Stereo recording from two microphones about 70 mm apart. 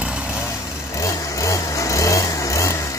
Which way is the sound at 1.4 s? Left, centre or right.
Left.